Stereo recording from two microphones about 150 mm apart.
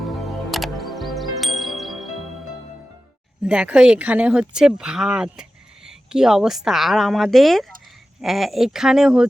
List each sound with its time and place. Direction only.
0.0 s music: centre (ahead or behind)
3.4 s speech: 5° right (ahead or behind)